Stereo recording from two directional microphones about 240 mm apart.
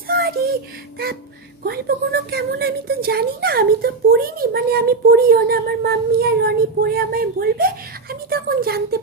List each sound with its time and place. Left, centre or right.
0.1 s child singing: right
1.7 s speech: right